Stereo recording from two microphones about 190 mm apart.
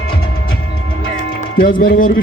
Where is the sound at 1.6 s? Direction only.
50° left (ahead or behind).